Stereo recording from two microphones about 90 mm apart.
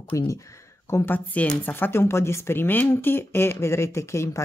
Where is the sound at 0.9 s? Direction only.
20° left (ahead or behind).